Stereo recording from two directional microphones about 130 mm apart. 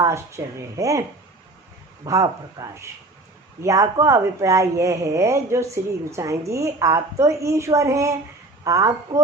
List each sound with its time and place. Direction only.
0.0 s speech: 20° right (ahead or behind)
2.0 s speech: 25° right (ahead or behind)